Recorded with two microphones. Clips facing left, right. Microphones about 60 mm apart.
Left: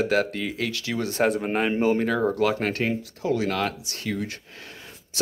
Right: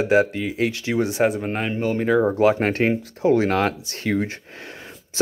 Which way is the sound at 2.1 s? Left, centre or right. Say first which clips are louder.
Right 5 dB; centre.